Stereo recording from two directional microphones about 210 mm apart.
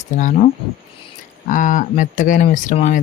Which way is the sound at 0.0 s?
35° left (ahead or behind).